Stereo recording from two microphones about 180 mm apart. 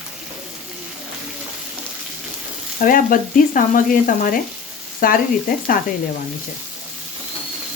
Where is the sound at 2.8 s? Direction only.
50° left (ahead or behind).